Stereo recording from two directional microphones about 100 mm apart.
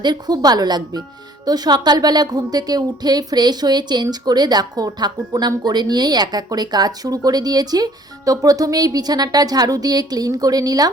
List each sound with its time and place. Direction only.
0.0 s speech: 45° right (ahead or behind)